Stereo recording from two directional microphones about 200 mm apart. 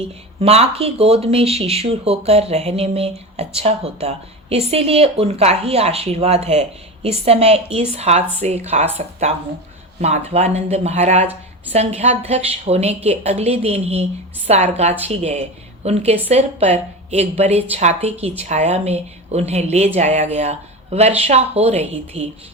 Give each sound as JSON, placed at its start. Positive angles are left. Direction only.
{"t": 0.3, "sound": "speech", "side_deg": -30}